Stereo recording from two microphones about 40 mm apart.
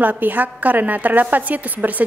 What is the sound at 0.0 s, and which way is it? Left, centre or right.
A woman's voice, right.